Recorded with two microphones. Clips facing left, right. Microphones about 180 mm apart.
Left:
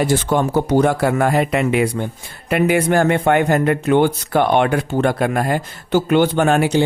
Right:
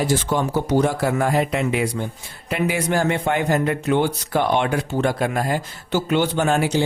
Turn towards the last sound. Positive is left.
turn(degrees=60)  # may be behind; listen again after turning